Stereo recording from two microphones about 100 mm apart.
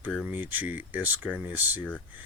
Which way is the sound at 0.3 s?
20° right (ahead or behind).